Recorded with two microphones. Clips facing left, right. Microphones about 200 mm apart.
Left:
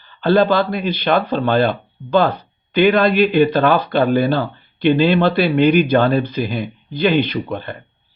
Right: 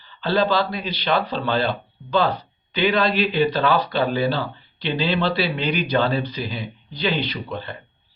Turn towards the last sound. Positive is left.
turn(degrees=55)  # may be behind; listen again after turning